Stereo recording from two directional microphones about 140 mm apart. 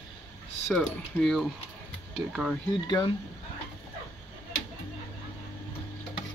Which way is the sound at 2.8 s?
30° left (ahead or behind).